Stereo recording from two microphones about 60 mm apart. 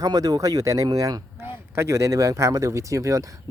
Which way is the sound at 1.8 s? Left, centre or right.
Right.